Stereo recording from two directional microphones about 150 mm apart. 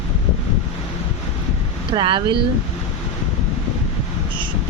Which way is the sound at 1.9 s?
35° right (ahead or behind).